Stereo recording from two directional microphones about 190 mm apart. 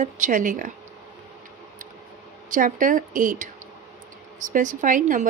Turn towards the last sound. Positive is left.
turn(degrees=-40)  # may be behind; listen again after turning